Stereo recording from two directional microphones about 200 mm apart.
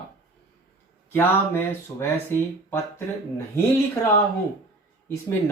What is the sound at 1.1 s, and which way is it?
Speech, 10° left (ahead or behind).